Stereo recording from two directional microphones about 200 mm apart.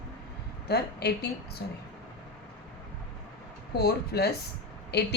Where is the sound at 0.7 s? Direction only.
55° left (ahead or behind).